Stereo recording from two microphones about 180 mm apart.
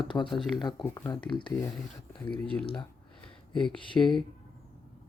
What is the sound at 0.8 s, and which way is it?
Speech, 15° left (ahead or behind).